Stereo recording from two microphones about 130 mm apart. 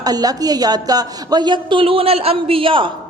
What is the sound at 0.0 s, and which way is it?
Speech, 30° right (ahead or behind).